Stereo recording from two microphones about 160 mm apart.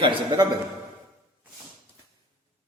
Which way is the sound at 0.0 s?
30° right (ahead or behind).